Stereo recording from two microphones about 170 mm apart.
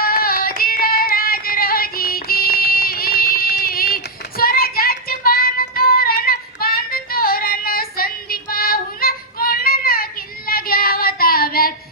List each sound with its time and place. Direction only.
0.0 s music: 60° left (ahead or behind)